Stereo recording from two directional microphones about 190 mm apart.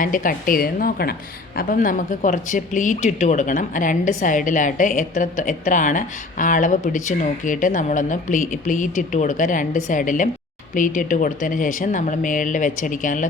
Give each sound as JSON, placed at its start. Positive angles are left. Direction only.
{"t": 0.0, "sound": "a woman's voice", "side_deg": 45}